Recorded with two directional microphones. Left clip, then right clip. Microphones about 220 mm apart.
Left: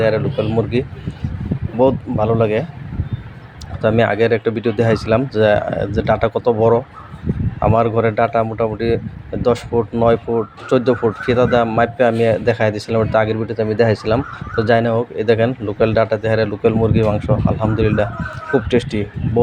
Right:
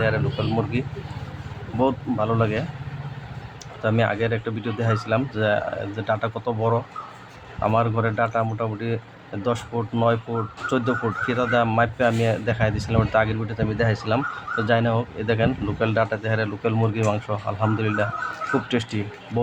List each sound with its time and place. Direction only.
0.0 s a man's voice: 15° left (ahead or behind)
3.8 s a man's voice: 25° left (ahead or behind)